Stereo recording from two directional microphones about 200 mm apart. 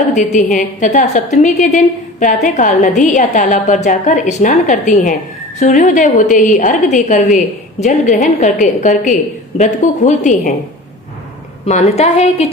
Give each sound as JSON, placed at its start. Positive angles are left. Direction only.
{"t": 0.1, "sound": "a woman's voice", "side_deg": 40}
{"t": 11.6, "sound": "a woman's voice", "side_deg": 35}